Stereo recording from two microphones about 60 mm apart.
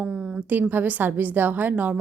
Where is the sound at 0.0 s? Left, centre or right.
Centre.